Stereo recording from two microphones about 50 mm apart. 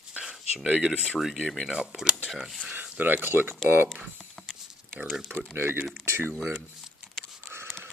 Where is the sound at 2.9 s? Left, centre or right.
Right.